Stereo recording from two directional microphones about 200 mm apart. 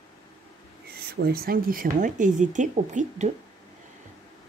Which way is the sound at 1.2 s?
50° right (ahead or behind).